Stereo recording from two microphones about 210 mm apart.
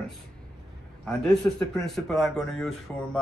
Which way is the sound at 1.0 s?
Centre (ahead or behind).